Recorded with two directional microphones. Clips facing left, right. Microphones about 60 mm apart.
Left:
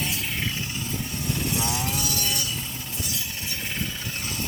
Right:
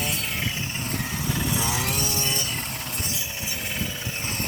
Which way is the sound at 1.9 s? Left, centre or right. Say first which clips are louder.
Right 1 dB; right.